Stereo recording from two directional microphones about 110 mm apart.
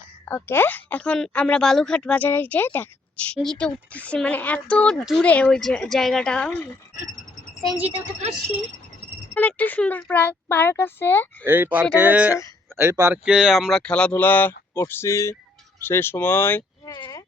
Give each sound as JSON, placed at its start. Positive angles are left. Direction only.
{"t": 0.3, "sound": "a woman's voice", "side_deg": 20}
{"t": 3.3, "sound": "a woman's voice", "side_deg": 5}
{"t": 9.3, "sound": "a woman's voice", "side_deg": 15}
{"t": 11.4, "sound": "speech", "side_deg": -20}
{"t": 12.7, "sound": "speech", "side_deg": -25}
{"t": 13.2, "sound": "speech", "side_deg": -5}